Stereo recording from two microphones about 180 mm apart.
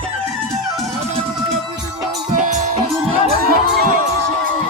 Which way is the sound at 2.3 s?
40° right (ahead or behind).